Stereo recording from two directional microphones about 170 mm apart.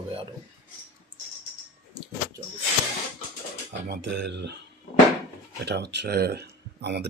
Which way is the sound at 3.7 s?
80° right.